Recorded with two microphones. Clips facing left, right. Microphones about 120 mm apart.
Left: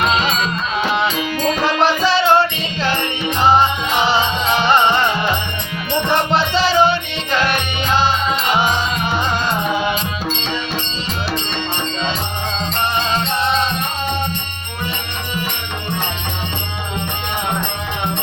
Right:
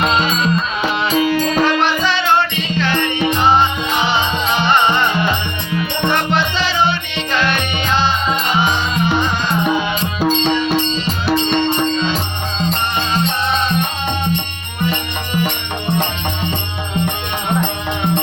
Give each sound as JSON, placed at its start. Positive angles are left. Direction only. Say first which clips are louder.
{"t": 1.8, "sound": "music", "louder": "left 2 dB", "side_deg": 35}
{"t": 6.3, "sound": "music", "louder": "left 3 dB", "side_deg": 35}